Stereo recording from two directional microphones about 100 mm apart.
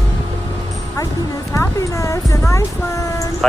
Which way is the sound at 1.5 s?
30° left (ahead or behind).